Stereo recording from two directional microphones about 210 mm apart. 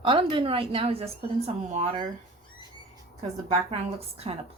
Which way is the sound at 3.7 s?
30° right (ahead or behind).